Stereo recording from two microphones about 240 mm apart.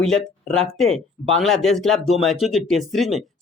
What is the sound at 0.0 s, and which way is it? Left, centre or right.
Speech, centre.